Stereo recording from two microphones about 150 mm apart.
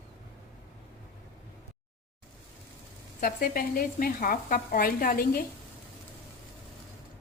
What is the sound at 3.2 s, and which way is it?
Speech, 70° left (ahead or behind).